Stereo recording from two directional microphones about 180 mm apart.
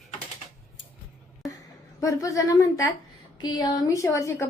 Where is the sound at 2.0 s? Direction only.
20° left (ahead or behind).